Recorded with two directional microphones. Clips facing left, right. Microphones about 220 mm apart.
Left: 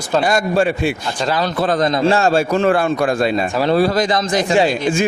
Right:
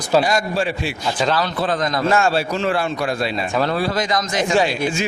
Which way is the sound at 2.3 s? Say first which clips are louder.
Left 5 dB; 50° left (ahead or behind).